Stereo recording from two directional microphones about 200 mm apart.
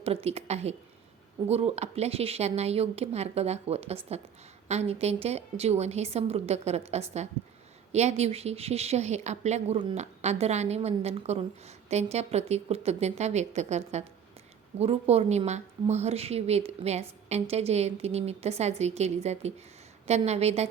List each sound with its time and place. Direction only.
0.0 s a woman's voice: 30° right (ahead or behind)